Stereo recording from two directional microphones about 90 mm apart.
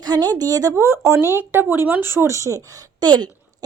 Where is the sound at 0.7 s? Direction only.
30° right (ahead or behind).